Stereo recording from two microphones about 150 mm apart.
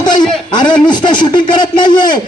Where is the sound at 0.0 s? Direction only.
30° left (ahead or behind).